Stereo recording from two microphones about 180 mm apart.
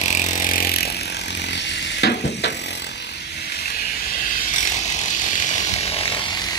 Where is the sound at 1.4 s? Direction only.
75° left (ahead or behind).